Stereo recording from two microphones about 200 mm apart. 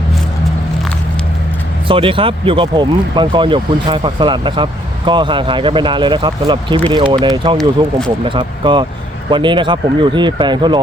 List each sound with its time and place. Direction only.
1.9 s speech: 25° right (ahead or behind)